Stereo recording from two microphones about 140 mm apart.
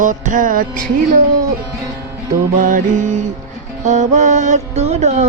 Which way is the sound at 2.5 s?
65° right (ahead or behind).